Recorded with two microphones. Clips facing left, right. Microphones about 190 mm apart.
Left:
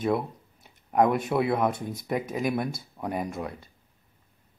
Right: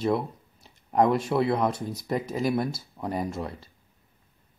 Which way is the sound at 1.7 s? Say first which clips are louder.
Right 1 dB; 25° left (ahead or behind).